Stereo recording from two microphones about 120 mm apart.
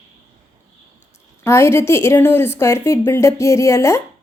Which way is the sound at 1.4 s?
20° left (ahead or behind).